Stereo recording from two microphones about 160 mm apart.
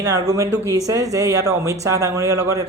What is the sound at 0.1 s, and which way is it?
Speech, 20° right (ahead or behind).